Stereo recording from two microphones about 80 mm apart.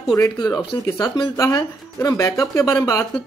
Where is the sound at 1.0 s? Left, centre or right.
Left.